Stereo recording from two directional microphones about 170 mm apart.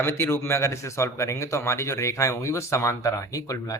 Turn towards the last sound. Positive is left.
turn(degrees=20)  # may be behind; listen again after turning